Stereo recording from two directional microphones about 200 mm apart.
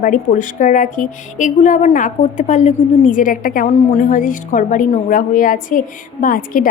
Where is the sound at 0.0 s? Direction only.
40° left (ahead or behind).